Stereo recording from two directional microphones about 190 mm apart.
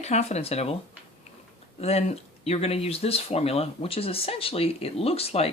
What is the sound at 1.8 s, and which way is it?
Speech, 35° left (ahead or behind).